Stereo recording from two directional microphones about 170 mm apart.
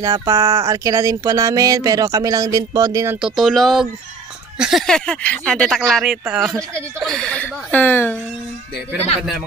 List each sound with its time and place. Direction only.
0.0 s speech: 20° right (ahead or behind)
3.2 s speech: centre (ahead or behind)